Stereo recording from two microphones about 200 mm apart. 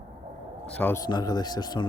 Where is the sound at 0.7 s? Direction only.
10° left (ahead or behind).